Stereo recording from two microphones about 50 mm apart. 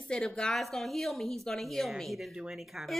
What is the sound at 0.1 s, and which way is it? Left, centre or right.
Speech, centre.